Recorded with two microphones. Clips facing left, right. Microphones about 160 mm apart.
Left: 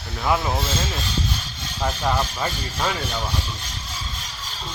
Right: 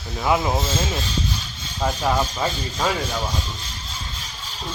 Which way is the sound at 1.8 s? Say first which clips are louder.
Right 2 dB; 15° right (ahead or behind).